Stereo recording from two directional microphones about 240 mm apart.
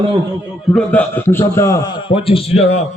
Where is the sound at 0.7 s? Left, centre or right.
Centre.